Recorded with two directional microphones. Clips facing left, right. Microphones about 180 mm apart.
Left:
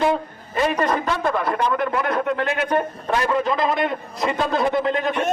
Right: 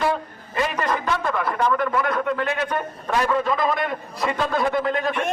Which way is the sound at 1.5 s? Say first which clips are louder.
Even; 25° left (ahead or behind).